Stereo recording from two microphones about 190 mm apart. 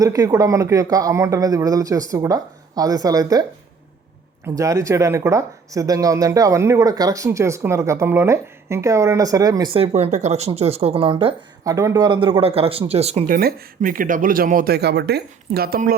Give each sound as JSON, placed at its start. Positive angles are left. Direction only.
{"t": 0.0, "sound": "speech", "side_deg": -20}
{"t": 4.4, "sound": "speech", "side_deg": -15}
{"t": 11.7, "sound": "speech", "side_deg": -15}
{"t": 13.3, "sound": "speech", "side_deg": -45}